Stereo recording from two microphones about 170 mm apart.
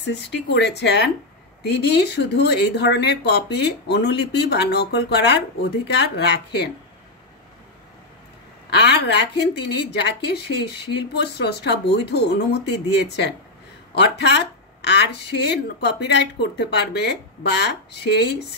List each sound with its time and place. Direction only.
0.0 s speech: 90° left
8.6 s speech: 85° left